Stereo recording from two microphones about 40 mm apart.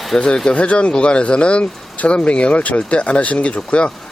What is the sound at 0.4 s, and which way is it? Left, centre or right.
Speech, left.